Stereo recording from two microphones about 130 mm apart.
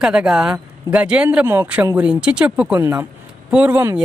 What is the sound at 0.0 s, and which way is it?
Speech, 5° right (ahead or behind).